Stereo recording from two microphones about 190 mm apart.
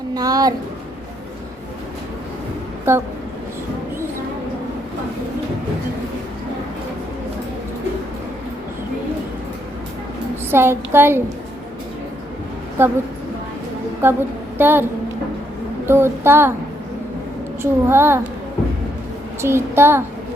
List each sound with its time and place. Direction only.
0.1 s speech: 20° right (ahead or behind)
2.9 s speech: 15° right (ahead or behind)
10.5 s speech: 10° right (ahead or behind)
12.8 s speech: 10° right (ahead or behind)
14.0 s speech: 10° right (ahead or behind)
15.9 s speech: 10° right (ahead or behind)
17.6 s speech: 10° right (ahead or behind)
19.4 s speech: 15° right (ahead or behind)